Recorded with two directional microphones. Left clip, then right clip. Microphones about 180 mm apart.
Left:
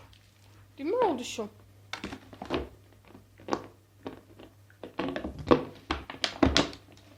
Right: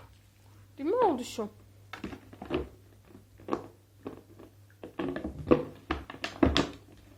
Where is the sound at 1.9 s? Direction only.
35° left (ahead or behind).